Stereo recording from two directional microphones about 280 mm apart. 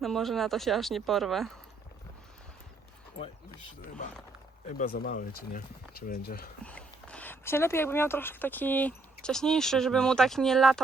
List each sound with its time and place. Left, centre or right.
0.0 s speech: centre
4.8 s speech: left
6.7 s speech: centre